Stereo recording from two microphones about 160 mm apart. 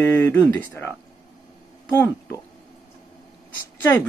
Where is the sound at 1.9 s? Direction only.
15° left (ahead or behind).